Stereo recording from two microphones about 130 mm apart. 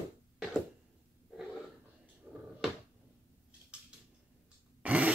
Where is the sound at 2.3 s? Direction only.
5° right (ahead or behind).